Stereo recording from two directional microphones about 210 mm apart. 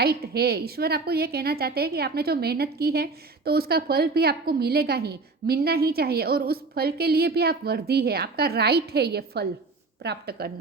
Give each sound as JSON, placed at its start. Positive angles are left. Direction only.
{"t": 0.0, "sound": "a woman's voice", "side_deg": -50}